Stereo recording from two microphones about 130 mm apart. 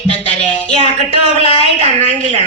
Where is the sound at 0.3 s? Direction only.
55° left (ahead or behind).